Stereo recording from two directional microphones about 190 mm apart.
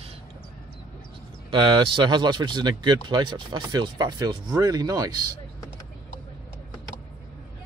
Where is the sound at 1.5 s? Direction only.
25° right (ahead or behind).